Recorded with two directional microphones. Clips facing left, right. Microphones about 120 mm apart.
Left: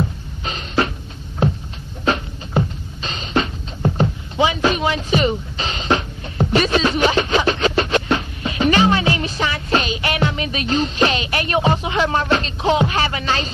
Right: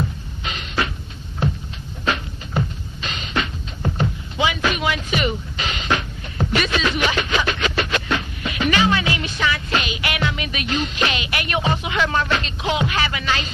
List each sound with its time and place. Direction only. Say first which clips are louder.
0.4 s music: left 4 dB; 35° left (ahead or behind)
2.0 s music: left 4 dB; 30° left (ahead or behind)